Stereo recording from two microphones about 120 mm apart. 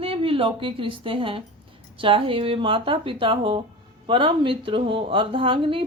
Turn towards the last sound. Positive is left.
turn(degrees=-45)  # may be behind; listen again after turning